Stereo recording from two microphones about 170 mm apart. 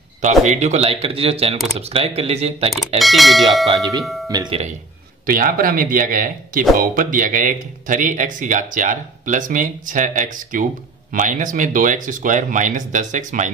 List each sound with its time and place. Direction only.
0.2 s speech: 40° right (ahead or behind)
3.0 s speech: centre (ahead or behind)
4.3 s speech: 25° right (ahead or behind)
5.2 s speech: 55° right (ahead or behind)